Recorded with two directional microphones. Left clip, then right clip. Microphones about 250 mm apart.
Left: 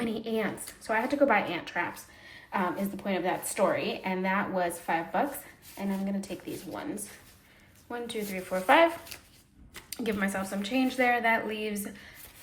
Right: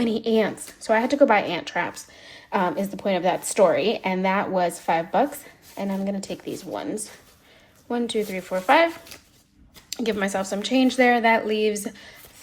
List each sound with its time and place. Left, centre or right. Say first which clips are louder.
0.0 s a woman's voice: right 9 dB; centre
7.9 s a woman's voice: right 10 dB; centre
9.9 s a woman's voice: right 7 dB; centre